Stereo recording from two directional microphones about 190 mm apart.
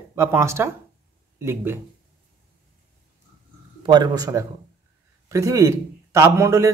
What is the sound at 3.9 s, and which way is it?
A man's voice, 20° right (ahead or behind).